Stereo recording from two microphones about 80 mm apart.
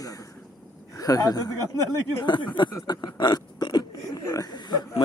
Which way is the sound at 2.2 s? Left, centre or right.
Left.